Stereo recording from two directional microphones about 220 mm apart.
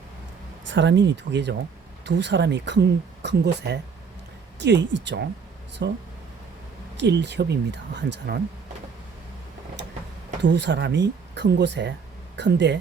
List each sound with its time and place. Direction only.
0.6 s speech: 55° right (ahead or behind)
7.0 s speech: 50° right (ahead or behind)
10.4 s speech: 50° right (ahead or behind)